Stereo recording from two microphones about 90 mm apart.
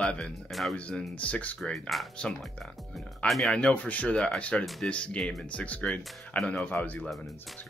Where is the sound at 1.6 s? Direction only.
Centre (ahead or behind).